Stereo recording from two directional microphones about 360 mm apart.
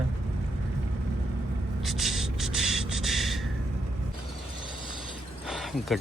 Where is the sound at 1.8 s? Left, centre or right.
Centre.